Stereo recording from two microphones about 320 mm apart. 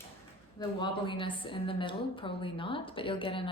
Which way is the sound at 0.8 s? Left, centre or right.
Centre.